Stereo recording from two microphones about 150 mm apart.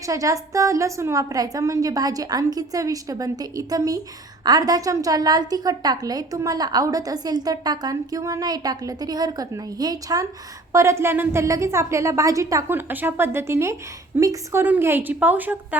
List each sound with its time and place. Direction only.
0.0 s a woman's voice: 20° right (ahead or behind)